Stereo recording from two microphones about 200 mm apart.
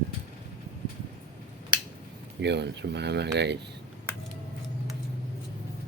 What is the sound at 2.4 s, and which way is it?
Speech, 60° right (ahead or behind).